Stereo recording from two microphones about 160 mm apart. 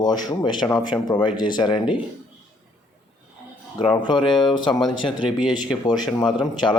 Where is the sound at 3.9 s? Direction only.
30° left (ahead or behind).